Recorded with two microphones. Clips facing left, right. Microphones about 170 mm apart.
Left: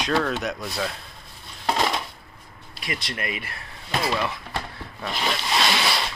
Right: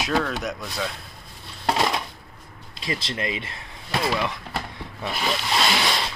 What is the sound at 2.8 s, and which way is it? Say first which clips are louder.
Speech: right 3 dB; 25° right (ahead or behind).